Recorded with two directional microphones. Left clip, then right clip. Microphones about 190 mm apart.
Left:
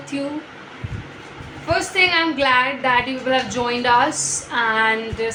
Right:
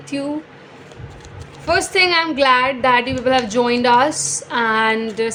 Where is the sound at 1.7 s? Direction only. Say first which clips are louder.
Right 2 dB; 60° right (ahead or behind).